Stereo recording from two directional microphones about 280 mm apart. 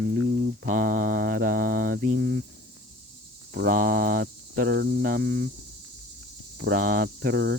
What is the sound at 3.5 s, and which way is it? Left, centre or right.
Speech, right.